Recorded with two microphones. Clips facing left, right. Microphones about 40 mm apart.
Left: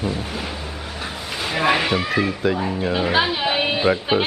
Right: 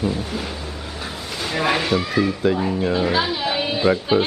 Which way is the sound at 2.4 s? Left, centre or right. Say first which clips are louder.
Right 2 dB; centre.